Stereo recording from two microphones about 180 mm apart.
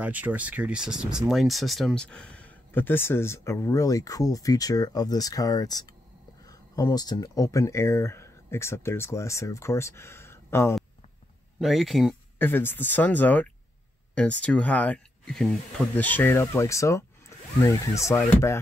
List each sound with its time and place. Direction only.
0.0 s speech: 10° right (ahead or behind); by 10.7 s 15° left (ahead or behind)
11.6 s speech: centre (ahead or behind)
12.4 s speech: 10° left (ahead or behind)